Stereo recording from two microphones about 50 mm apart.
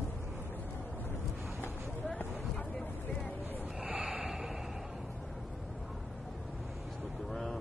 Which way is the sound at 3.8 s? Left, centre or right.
Centre.